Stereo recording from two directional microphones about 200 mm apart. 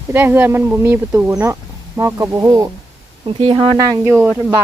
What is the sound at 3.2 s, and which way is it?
Speech, 25° right (ahead or behind).